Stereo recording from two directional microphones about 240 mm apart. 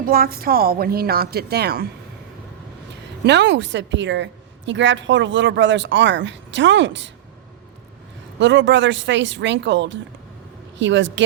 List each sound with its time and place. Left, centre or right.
0.0 s speech: right
3.2 s a woman's voice: right
8.4 s a woman's voice: right